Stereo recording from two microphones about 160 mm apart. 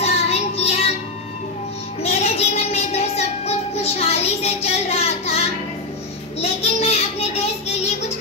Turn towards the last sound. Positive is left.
turn(degrees=40)  # may be behind; listen again after turning